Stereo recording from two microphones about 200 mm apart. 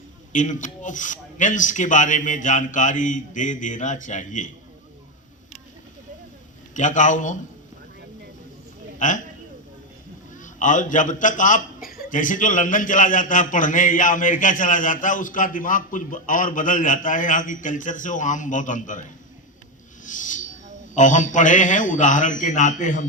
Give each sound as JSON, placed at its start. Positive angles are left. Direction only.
{"t": 0.3, "sound": "a man's voice", "side_deg": 40}
{"t": 6.7, "sound": "a man's voice", "side_deg": 40}
{"t": 9.0, "sound": "a man's voice", "side_deg": 40}
{"t": 10.3, "sound": "a man's voice", "side_deg": 40}
{"t": 20.1, "sound": "a sound", "side_deg": 40}
{"t": 20.9, "sound": "a man's voice", "side_deg": 40}